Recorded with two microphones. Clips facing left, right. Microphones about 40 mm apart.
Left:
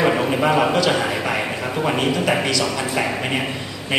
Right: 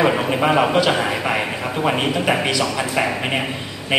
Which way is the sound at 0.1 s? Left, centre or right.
Centre.